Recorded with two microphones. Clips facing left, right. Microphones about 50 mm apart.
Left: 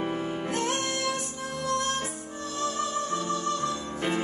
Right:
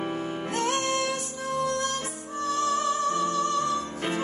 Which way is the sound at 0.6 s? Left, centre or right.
Right.